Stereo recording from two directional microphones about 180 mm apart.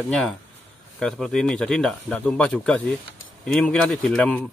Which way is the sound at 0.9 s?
5° left (ahead or behind).